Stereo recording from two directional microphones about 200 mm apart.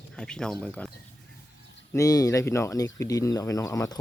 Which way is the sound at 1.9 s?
15° left (ahead or behind).